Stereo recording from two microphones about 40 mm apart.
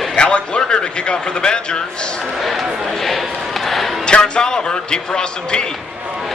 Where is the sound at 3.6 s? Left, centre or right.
Centre.